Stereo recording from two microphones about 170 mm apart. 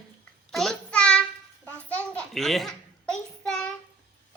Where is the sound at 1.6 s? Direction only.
10° left (ahead or behind).